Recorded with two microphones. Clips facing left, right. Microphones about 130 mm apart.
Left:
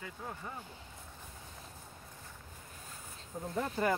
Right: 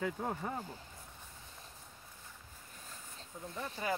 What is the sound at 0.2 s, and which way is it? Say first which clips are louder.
Speech: right 6 dB; 45° right (ahead or behind).